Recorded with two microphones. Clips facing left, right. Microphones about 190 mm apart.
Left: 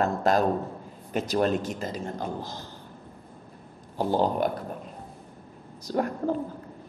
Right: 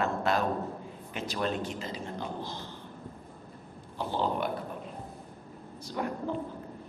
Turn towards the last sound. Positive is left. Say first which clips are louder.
# left 6 dB
turn(degrees=45)  # may be behind; listen again after turning